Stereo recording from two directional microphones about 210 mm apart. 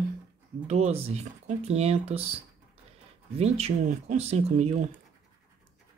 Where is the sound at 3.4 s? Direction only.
30° right (ahead or behind).